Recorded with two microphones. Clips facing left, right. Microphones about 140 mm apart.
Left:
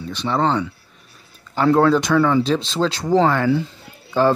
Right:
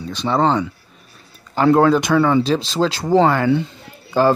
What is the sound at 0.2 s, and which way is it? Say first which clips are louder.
Speech: right 3 dB; 15° right (ahead or behind).